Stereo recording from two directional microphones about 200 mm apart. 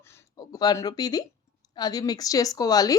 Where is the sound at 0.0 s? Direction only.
15° left (ahead or behind).